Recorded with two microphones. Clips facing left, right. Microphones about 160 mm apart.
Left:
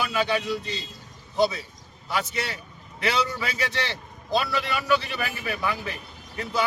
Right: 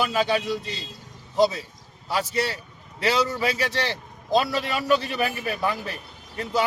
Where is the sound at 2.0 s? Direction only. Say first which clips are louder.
Right 3 dB; 35° right (ahead or behind).